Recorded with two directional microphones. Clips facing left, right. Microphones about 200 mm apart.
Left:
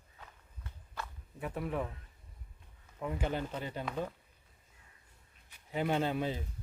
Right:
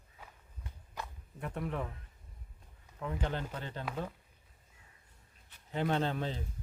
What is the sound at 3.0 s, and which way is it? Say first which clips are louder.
Speech: left 2 dB; 10° left (ahead or behind).